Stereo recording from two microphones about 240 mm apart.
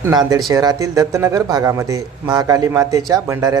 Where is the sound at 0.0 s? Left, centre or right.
Centre.